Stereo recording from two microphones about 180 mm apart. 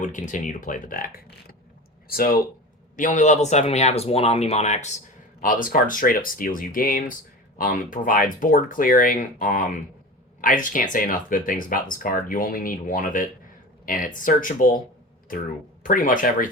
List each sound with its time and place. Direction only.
0.0 s a man's voice: 45° left (ahead or behind)
5.4 s speech: 50° left (ahead or behind)